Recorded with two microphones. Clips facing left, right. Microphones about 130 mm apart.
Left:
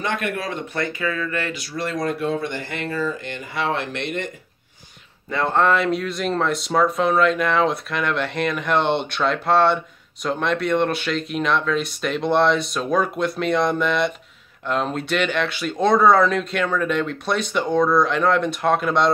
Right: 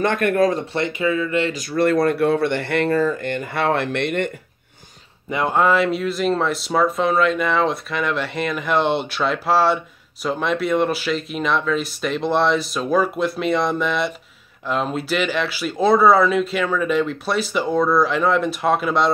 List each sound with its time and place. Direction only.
0.0 s speech: 50° right (ahead or behind)
0.7 s speech: 20° right (ahead or behind)
1.5 s speech: 50° right (ahead or behind)
5.3 s speech: 10° right (ahead or behind)